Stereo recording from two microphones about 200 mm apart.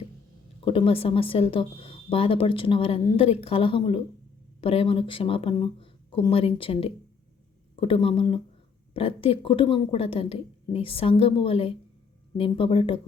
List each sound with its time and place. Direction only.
0.6 s a woman's voice: 25° left (ahead or behind)